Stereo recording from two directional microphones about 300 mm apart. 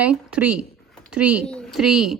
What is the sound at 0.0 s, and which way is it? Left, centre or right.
A woman's voice, centre.